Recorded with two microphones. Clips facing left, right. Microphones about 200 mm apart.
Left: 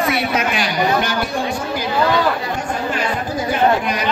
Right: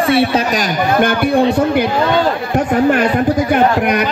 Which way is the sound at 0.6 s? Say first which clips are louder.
Right 4 dB; 50° right (ahead or behind).